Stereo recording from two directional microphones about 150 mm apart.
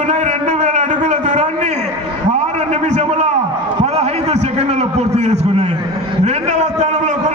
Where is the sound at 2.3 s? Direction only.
45° right (ahead or behind).